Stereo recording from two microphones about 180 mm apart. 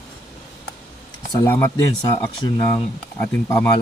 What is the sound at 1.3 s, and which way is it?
Speech, 15° left (ahead or behind).